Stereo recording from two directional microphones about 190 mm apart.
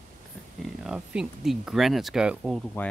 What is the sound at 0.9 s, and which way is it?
Speech, 5° right (ahead or behind).